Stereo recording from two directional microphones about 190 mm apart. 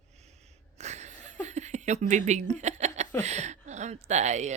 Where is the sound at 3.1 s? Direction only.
35° right (ahead or behind).